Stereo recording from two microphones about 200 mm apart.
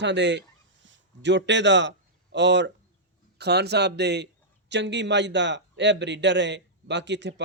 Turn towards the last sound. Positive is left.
turn(degrees=-60)  # may be behind; listen again after turning